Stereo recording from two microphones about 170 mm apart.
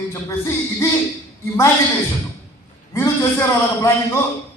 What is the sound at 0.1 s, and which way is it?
Speech, 15° left (ahead or behind).